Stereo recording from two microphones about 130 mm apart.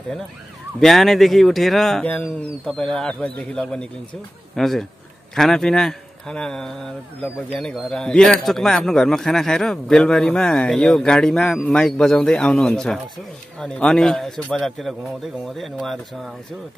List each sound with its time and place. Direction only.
0.7 s a man's voice: centre (ahead or behind)